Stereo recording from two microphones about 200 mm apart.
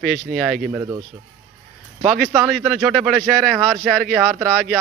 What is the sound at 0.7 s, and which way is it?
Speech, 15° right (ahead or behind).